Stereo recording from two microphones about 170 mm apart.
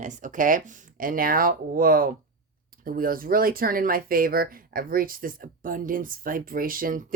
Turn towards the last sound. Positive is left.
turn(degrees=-55)  # may be behind; listen again after turning